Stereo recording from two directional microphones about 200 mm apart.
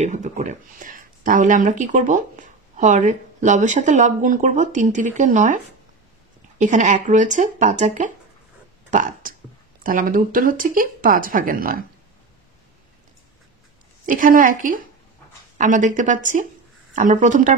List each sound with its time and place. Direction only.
0.0 s speech: 40° right (ahead or behind)
6.6 s speech: 35° right (ahead or behind)
14.0 s speech: 40° right (ahead or behind)